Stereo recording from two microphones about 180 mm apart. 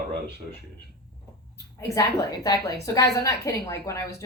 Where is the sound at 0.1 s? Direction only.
65° right (ahead or behind).